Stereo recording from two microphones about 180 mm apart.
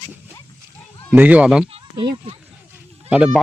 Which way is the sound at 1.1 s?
10° right (ahead or behind).